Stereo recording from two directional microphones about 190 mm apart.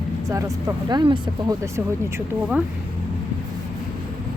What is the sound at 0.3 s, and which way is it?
Speech, 15° right (ahead or behind).